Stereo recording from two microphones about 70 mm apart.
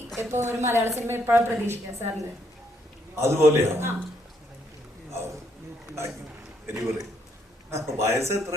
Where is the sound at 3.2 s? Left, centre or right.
Right.